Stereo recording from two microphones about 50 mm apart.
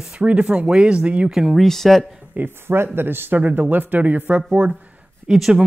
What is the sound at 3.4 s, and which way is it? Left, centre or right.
Speech, right.